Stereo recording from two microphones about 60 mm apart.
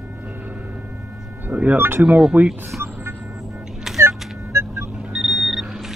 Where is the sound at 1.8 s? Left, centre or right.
Right.